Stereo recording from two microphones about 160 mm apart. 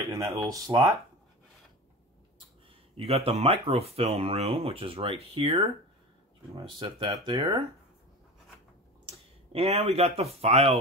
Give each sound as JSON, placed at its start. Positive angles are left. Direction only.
{"t": 0.0, "sound": "a sound", "side_deg": -20}
{"t": 0.5, "sound": "speech", "side_deg": -20}
{"t": 3.0, "sound": "speech", "side_deg": -40}
{"t": 9.5, "sound": "speech", "side_deg": -40}